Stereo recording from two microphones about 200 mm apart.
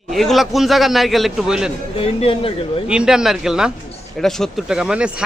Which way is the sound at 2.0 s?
25° left (ahead or behind).